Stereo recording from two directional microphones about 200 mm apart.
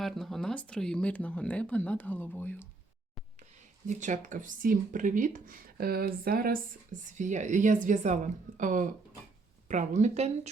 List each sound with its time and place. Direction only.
0.0 s speech: centre (ahead or behind)
3.8 s speech: 40° right (ahead or behind)